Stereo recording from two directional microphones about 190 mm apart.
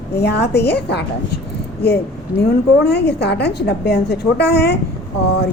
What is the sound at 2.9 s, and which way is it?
A woman's voice, 60° left (ahead or behind).